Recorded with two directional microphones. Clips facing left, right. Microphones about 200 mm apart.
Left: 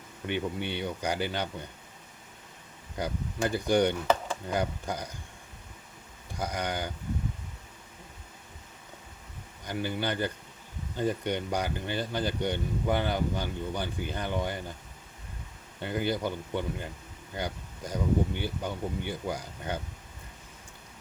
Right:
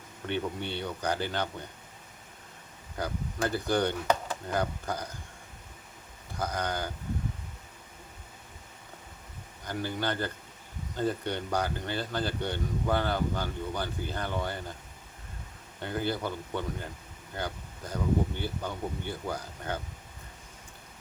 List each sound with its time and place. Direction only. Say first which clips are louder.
0.3 s speech: left 1 dB; 15° left (ahead or behind)
3.0 s speech: left 1 dB; 15° left (ahead or behind)
6.4 s speech: even; 15° left (ahead or behind)
9.6 s speech: left 1 dB; 15° left (ahead or behind)
15.8 s speech: left 2 dB; 15° left (ahead or behind)